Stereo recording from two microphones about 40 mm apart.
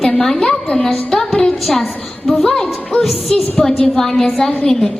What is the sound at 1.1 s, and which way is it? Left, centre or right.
Music, centre.